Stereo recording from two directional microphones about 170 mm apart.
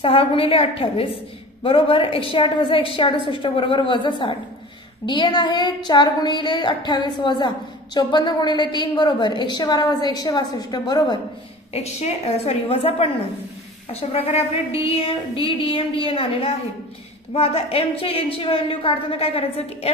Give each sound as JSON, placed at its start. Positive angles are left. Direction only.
{"t": 0.0, "sound": "a woman's voice", "side_deg": 35}
{"t": 11.7, "sound": "a woman's voice", "side_deg": 40}